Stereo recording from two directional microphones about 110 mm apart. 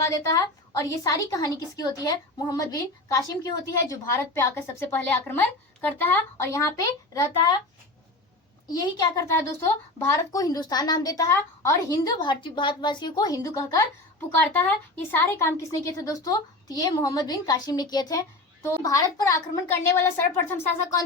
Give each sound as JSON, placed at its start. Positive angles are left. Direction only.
{"t": 0.0, "sound": "a woman's voice", "side_deg": 30}
{"t": 8.8, "sound": "a woman's voice", "side_deg": 30}
{"t": 16.0, "sound": "a woman's voice", "side_deg": 30}